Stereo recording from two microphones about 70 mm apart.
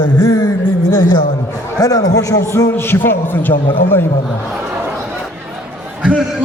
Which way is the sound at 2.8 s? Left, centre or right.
Left.